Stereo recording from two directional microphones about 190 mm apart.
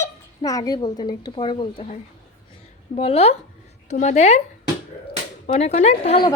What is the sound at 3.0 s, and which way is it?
Speech, 35° left (ahead or behind).